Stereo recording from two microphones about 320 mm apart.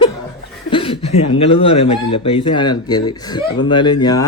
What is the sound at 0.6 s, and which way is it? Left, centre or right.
Chuckle, centre.